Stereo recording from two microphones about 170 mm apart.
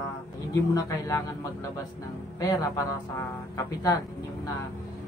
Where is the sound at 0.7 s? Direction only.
20° left (ahead or behind).